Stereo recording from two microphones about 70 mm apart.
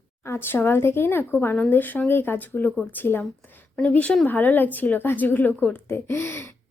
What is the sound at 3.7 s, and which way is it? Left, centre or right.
A woman's voice, left.